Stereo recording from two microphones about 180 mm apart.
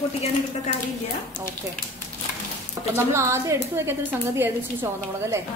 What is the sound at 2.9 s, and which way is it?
A woman's voice, 15° right (ahead or behind).